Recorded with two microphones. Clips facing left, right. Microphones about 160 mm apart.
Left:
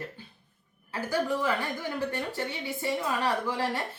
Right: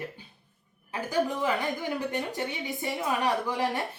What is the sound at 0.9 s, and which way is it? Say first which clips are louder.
Speech: right 1 dB; 15° right (ahead or behind).